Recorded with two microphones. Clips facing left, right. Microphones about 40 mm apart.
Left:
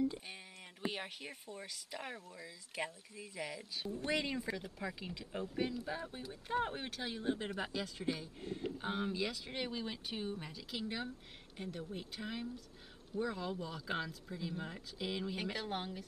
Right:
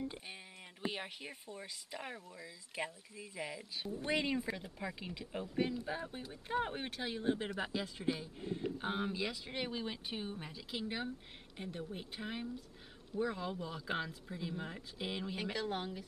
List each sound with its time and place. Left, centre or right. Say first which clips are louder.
0.8 s speech: even; centre
15.3 s speech: right 1 dB; centre